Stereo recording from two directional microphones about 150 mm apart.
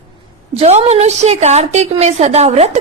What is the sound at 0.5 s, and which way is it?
A woman's voice, 45° right (ahead or behind).